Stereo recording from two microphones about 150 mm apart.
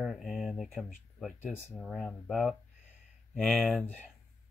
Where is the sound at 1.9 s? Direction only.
Centre (ahead or behind).